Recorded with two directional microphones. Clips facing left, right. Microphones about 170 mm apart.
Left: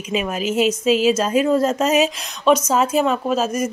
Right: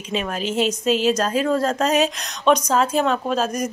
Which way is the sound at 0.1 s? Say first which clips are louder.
Left 3 dB; 5° left (ahead or behind).